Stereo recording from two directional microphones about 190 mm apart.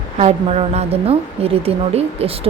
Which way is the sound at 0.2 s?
30° right (ahead or behind).